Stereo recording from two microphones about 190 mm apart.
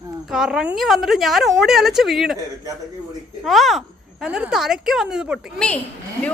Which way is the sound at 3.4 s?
Centre (ahead or behind).